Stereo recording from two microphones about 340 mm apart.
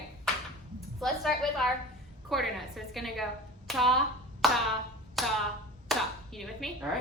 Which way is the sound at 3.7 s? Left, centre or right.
Centre.